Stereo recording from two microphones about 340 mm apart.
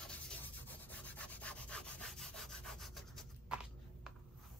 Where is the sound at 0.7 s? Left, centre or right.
Centre.